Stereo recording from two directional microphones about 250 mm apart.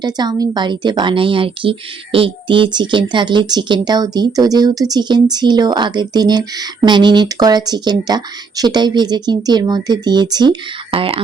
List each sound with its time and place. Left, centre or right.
0.0 s speech: centre